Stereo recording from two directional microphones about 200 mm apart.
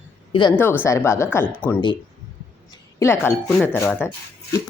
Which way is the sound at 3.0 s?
10° left (ahead or behind).